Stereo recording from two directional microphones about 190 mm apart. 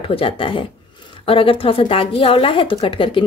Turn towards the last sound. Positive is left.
turn(degrees=25)  # may be behind; listen again after turning